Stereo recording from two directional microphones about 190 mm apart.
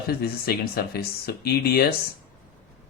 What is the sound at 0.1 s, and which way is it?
Speech, 55° left (ahead or behind).